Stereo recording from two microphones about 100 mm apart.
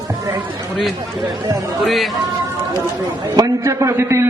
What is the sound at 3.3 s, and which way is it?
Speech, 35° right (ahead or behind).